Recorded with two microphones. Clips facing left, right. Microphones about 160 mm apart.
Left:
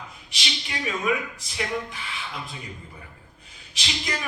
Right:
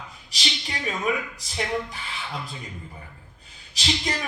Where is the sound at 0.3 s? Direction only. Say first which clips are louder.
Right 2 dB; 40° right (ahead or behind).